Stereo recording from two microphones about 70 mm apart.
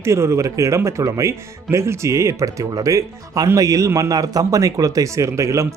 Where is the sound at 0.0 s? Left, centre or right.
Right.